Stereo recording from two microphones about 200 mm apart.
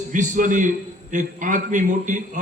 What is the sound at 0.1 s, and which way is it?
A man's voice, 40° right (ahead or behind).